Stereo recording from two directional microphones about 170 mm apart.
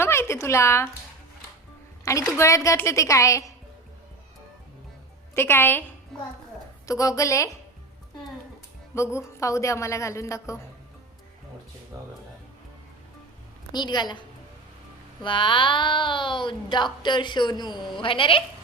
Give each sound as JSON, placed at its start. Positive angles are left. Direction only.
{"t": 0.0, "sound": "speech", "side_deg": 15}
{"t": 2.0, "sound": "a woman's voice", "side_deg": 15}
{"t": 5.3, "sound": "a woman's voice", "side_deg": 15}
{"t": 6.8, "sound": "speech", "side_deg": 20}
{"t": 9.1, "sound": "a woman's voice", "side_deg": 15}
{"t": 11.9, "sound": "speech", "side_deg": -20}
{"t": 13.7, "sound": "speech", "side_deg": 25}